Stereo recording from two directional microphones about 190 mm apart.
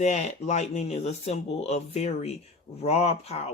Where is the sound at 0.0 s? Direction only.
40° left (ahead or behind).